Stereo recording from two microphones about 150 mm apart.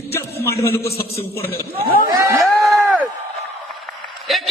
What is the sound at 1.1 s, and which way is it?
Speech, 40° left (ahead or behind).